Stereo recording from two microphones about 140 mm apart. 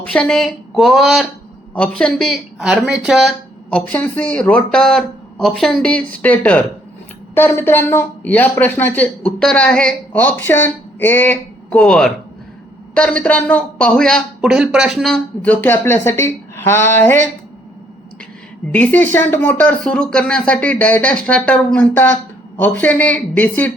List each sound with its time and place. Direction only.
0.0 s speech: 10° left (ahead or behind)
3.7 s a woman's voice: 10° left (ahead or behind)
18.7 s a woman's voice: 10° left (ahead or behind)